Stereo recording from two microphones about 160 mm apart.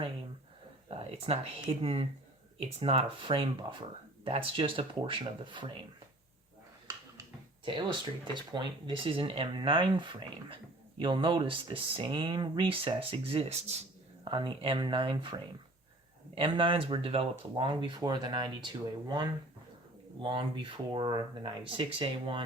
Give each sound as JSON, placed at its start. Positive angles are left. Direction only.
{"t": 0.9, "sound": "a sound", "side_deg": -40}
{"t": 1.8, "sound": "speech", "side_deg": -35}
{"t": 7.6, "sound": "speech", "side_deg": -30}
{"t": 14.3, "sound": "speech", "side_deg": -30}
{"t": 20.2, "sound": "speech", "side_deg": -35}